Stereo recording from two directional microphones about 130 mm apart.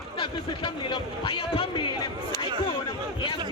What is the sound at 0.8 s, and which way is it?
Speech, 35° left (ahead or behind).